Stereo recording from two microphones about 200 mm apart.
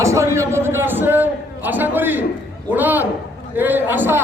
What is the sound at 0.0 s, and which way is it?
A man's voice, 15° right (ahead or behind).